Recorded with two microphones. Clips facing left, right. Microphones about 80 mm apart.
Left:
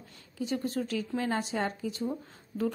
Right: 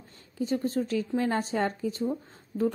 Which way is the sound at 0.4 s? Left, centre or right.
Right.